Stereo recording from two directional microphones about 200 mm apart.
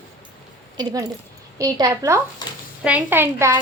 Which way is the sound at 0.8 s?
20° right (ahead or behind).